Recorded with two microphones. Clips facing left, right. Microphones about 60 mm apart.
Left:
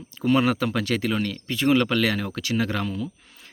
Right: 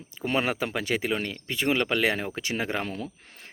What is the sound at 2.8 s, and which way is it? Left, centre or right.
Speech, right.